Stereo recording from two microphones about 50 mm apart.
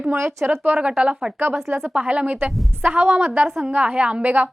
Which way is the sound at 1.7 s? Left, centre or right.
Right.